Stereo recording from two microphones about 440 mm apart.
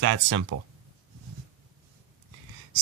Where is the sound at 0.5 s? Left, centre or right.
Right.